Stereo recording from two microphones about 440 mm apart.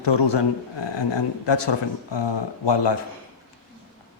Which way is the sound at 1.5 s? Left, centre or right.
Left.